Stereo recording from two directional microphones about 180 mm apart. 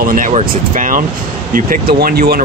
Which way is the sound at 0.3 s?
40° right (ahead or behind).